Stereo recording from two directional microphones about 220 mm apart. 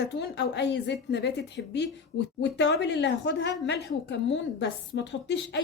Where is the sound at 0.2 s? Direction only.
50° left (ahead or behind).